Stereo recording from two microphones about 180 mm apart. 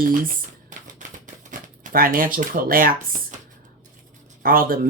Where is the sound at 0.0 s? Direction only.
50° right (ahead or behind).